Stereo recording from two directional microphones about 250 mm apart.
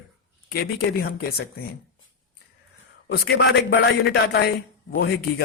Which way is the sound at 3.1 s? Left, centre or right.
Left.